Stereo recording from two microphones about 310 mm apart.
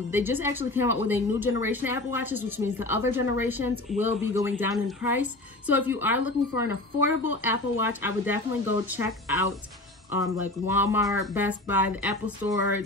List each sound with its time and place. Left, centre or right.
0.1 s a woman's voice: centre
10.1 s a woman's voice: centre